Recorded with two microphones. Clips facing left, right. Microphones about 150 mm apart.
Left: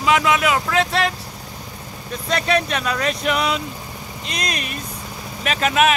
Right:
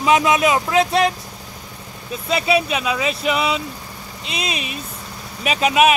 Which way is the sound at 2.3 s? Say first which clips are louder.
Right 2 dB; 5° right (ahead or behind).